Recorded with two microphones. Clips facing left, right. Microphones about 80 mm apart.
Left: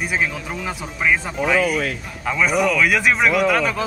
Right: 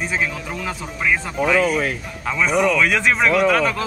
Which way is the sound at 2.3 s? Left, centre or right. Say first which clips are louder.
Even; centre.